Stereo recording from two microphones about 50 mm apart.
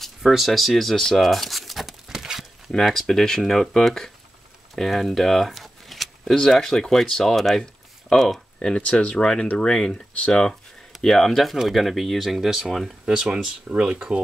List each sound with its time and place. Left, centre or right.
0.5 s speech: centre
2.8 s speech: centre
4.7 s a sound: centre
6.3 s speech: centre
8.5 s speech: centre
11.0 s speech: centre